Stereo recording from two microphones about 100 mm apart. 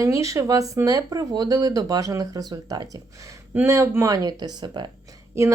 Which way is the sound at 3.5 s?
30° right (ahead or behind).